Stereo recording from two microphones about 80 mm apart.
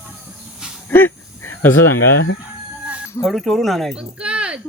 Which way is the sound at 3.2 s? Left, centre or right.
Centre.